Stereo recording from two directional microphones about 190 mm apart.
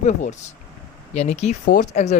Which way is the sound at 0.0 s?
40° left (ahead or behind).